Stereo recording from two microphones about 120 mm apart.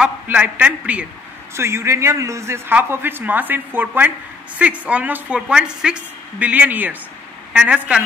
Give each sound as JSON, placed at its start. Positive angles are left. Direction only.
{"t": 0.0, "sound": "a woman's voice", "side_deg": -10}
{"t": 1.5, "sound": "a man's voice", "side_deg": -20}